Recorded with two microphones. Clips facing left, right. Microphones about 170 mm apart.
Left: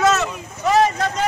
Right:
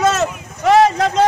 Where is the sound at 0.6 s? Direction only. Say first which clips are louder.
Right 5 dB; 90° right.